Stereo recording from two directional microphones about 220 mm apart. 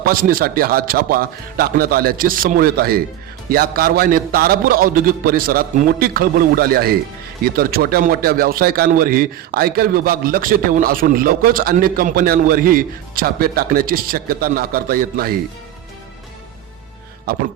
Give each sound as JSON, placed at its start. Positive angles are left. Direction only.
{"t": 0.0, "sound": "a man's voice", "side_deg": -40}